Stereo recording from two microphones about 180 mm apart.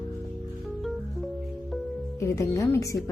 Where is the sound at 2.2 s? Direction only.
15° left (ahead or behind).